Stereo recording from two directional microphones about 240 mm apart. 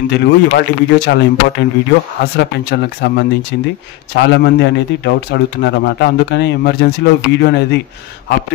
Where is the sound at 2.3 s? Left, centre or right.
Left.